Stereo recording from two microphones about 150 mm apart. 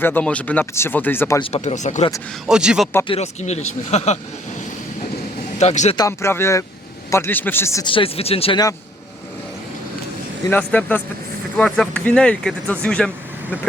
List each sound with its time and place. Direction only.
0.0 s speech: 10° left (ahead or behind)
1.4 s speech: 35° left (ahead or behind)
1.6 s speech: 50° left (ahead or behind)
2.5 s speech: 5° right (ahead or behind)
3.1 s speech: 45° left (ahead or behind)
5.5 s speech: 50° left (ahead or behind)
6.0 s speech: 15° left (ahead or behind)
7.9 s speech: 35° left (ahead or behind)
10.5 s speech: 10° left (ahead or behind)